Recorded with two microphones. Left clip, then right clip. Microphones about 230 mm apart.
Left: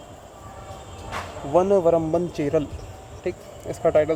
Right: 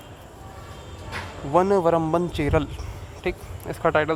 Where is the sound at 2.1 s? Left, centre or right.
Centre.